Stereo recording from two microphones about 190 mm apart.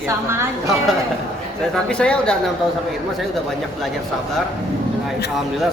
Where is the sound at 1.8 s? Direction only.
5° left (ahead or behind).